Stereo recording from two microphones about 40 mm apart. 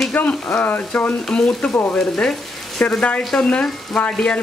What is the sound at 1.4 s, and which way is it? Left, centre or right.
Speech, centre.